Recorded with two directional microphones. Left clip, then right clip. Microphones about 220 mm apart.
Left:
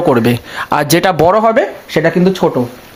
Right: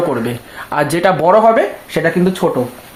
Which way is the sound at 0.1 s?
55° left (ahead or behind).